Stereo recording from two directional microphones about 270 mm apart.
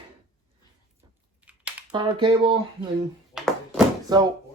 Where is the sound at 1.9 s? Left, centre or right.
Centre.